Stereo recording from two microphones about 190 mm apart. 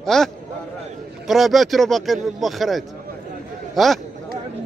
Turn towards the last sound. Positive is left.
turn(degrees=0)  # may be behind; listen again after turning